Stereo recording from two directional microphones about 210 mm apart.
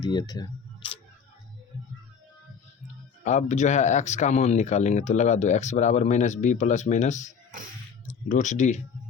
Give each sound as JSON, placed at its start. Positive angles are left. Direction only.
{"t": 0.0, "sound": "speech", "side_deg": 20}
{"t": 3.2, "sound": "speech", "side_deg": 35}